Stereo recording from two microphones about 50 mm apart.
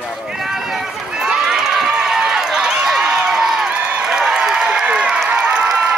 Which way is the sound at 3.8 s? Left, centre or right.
Centre.